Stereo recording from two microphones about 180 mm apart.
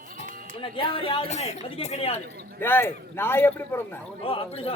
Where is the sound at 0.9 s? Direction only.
30° left (ahead or behind).